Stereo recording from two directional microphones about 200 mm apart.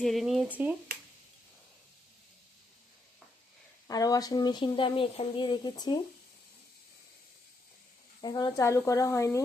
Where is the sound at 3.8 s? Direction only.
20° left (ahead or behind).